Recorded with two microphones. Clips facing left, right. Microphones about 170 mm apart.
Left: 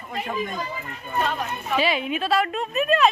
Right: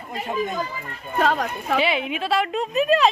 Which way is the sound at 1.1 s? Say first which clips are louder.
Right 4 dB; 90° right.